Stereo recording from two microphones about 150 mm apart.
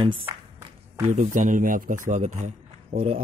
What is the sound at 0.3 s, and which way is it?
Music, 25° right (ahead or behind).